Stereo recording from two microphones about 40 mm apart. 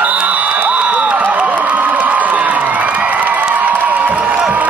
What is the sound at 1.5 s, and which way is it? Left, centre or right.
Crowd, right.